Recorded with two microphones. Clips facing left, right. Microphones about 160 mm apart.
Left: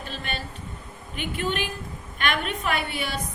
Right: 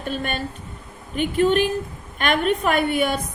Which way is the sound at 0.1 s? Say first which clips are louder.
Right 10 dB; 50° right (ahead or behind).